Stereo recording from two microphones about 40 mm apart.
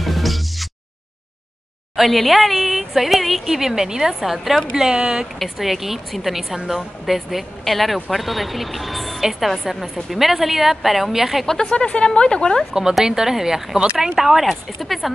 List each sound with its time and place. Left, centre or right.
0.0 s music: centre
2.0 s a woman's voice: centre
4.7 s a woman's voice: centre
5.4 s a woman's voice: centre
11.4 s a woman's voice: centre
13.0 s a woman's voice: centre